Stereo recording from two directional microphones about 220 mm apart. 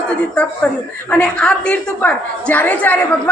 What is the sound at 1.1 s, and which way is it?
A woman's voice, 5° left (ahead or behind).